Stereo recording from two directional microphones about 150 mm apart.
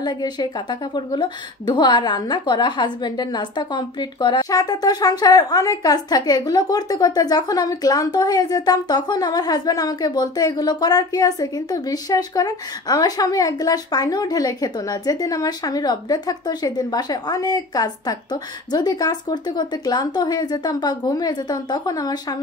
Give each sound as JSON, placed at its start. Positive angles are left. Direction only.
{"t": 0.0, "sound": "a woman's voice", "side_deg": 25}